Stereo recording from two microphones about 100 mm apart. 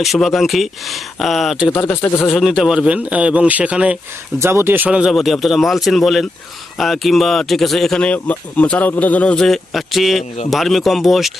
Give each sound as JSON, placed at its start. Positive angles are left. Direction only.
{"t": 0.0, "sound": "a man's voice", "side_deg": 0}
{"t": 4.4, "sound": "speech", "side_deg": -25}
{"t": 4.9, "sound": "speech", "side_deg": -5}